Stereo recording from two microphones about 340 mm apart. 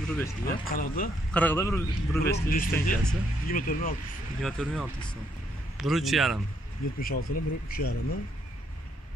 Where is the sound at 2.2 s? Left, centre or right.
Left.